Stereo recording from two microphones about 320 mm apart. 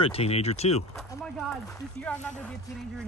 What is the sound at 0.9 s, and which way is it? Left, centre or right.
Speech, centre.